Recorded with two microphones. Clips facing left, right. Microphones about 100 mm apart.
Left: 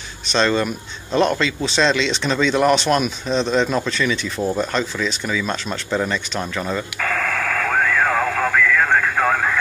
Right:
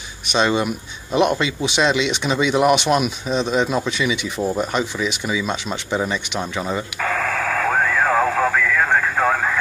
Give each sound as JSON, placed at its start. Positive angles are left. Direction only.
{"t": 0.3, "sound": "speech", "side_deg": -15}